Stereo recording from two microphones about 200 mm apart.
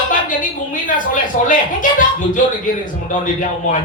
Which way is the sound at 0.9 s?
40° left (ahead or behind).